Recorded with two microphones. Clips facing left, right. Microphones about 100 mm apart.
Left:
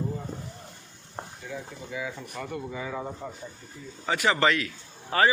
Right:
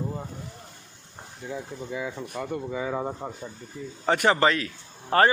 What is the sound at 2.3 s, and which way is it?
Speech, 25° right (ahead or behind).